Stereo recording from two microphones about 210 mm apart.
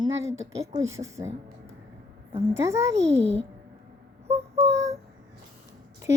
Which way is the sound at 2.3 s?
15° right (ahead or behind).